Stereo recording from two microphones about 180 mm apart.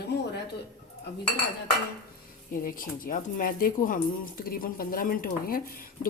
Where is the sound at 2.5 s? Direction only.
50° left (ahead or behind).